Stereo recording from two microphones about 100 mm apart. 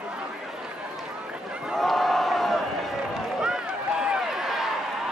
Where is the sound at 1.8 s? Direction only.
Centre (ahead or behind).